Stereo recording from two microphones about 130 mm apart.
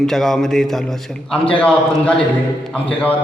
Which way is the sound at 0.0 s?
Centre (ahead or behind).